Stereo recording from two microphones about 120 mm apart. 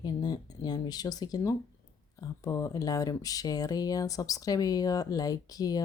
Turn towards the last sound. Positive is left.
turn(degrees=30)  # may be behind; listen again after turning